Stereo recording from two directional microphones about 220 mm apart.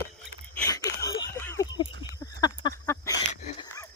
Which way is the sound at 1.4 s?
15° left (ahead or behind).